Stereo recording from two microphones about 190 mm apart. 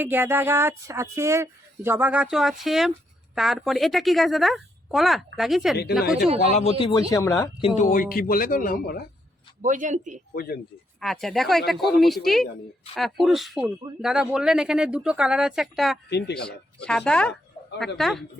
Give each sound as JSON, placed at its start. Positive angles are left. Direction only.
{"t": 0.0, "sound": "a woman's voice", "side_deg": -10}
{"t": 6.5, "sound": "speech", "side_deg": 35}
{"t": 7.1, "sound": "speech", "side_deg": 15}
{"t": 7.8, "sound": "speech", "side_deg": 45}
{"t": 9.6, "sound": "a man's voice", "side_deg": -40}
{"t": 10.3, "sound": "speech", "side_deg": 55}
{"t": 11.0, "sound": "a woman's voice", "side_deg": 0}
{"t": 16.0, "sound": "speech", "side_deg": 60}
{"t": 16.8, "sound": "a woman's voice", "side_deg": 5}